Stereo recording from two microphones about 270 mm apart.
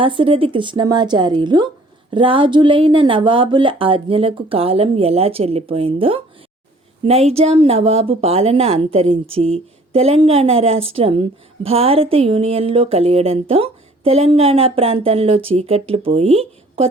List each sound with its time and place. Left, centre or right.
0.0 s speech: centre